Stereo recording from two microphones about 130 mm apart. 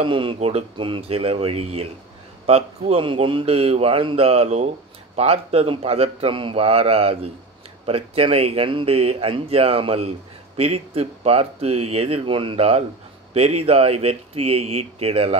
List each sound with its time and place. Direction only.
0.0 s speech: 40° right (ahead or behind)